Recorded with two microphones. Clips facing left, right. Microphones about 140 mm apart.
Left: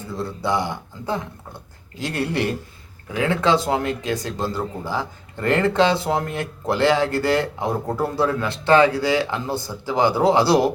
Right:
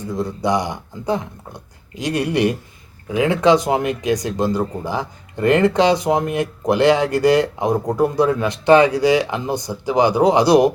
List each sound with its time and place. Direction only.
0.1 s speech: 15° right (ahead or behind)